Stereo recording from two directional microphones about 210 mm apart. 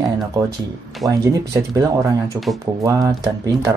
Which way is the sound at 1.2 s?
15° right (ahead or behind).